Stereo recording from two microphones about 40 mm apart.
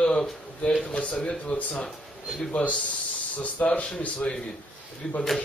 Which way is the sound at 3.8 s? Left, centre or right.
Left.